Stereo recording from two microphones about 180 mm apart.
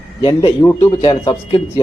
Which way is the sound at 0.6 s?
20° left (ahead or behind).